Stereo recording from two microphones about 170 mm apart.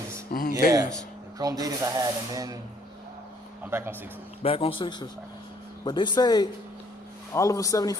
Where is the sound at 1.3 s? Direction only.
20° right (ahead or behind).